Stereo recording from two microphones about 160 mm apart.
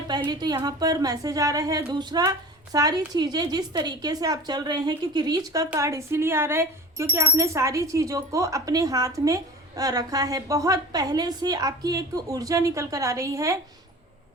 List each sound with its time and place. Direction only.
0.3 s a woman's voice: 25° right (ahead or behind)